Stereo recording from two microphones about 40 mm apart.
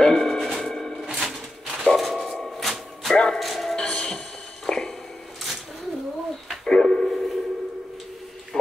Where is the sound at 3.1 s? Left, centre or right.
Centre.